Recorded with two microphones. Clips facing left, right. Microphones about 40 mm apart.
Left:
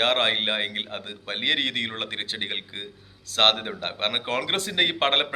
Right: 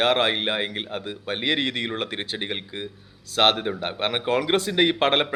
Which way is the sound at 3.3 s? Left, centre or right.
Left.